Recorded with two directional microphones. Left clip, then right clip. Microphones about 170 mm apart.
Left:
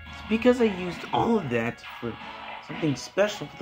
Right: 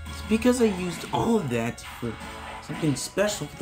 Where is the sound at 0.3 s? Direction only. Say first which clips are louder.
Left 1 dB; centre (ahead or behind).